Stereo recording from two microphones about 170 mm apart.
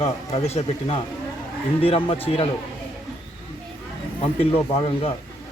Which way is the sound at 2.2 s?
35° left (ahead or behind).